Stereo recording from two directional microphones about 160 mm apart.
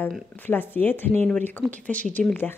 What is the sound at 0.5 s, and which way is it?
Speech, 10° left (ahead or behind).